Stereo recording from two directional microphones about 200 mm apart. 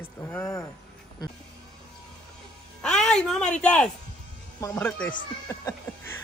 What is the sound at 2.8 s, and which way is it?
Speech, 5° left (ahead or behind).